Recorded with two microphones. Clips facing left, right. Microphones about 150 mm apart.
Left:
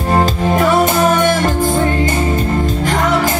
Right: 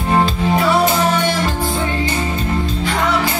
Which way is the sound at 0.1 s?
45° left (ahead or behind).